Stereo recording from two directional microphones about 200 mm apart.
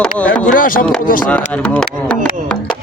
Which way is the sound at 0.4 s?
40° left (ahead or behind).